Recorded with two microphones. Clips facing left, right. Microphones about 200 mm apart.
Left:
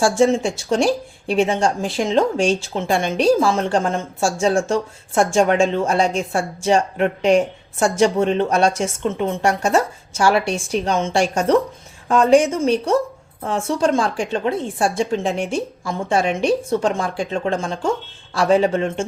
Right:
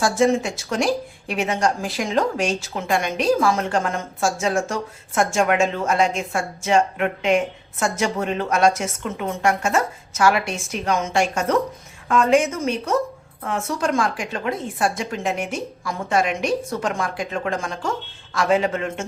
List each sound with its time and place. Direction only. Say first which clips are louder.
0.0 s a woman's voice: left 3 dB; 30° left (ahead or behind)